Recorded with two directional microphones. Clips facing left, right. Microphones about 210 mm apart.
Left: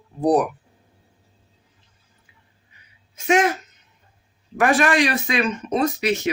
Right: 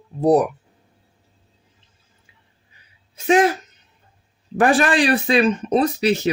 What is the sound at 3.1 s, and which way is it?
Speech, 35° right (ahead or behind).